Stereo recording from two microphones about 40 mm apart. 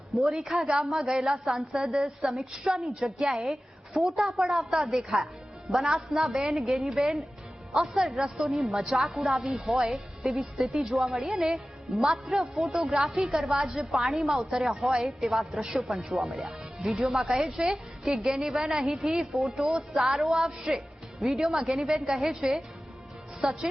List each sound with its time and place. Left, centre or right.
0.2 s a woman's voice: centre
10.2 s a woman's voice: centre
11.5 s speech: centre
12.5 s a woman's voice: centre
12.8 s a woman's voice: centre
16.2 s a woman's voice: centre
16.5 s music: centre
17.1 s a woman's voice: centre
19.6 s a woman's voice: centre
20.0 s a woman's voice: centre